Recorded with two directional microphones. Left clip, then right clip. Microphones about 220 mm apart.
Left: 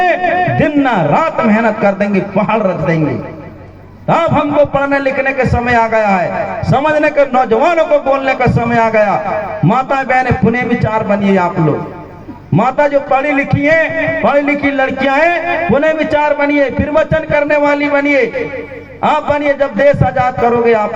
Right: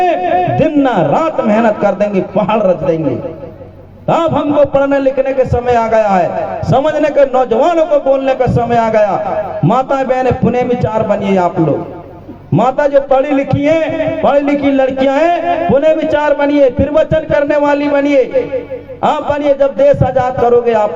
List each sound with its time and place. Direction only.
0.5 s a man's voice: 55° right (ahead or behind)
4.1 s a man's voice: 55° right (ahead or behind)
12.5 s a man's voice: 55° right (ahead or behind)